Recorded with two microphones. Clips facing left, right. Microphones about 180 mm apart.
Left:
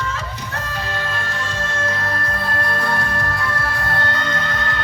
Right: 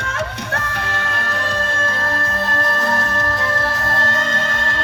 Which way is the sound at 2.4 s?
45° right (ahead or behind).